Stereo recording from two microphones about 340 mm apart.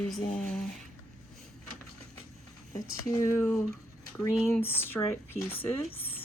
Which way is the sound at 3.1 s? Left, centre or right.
Centre.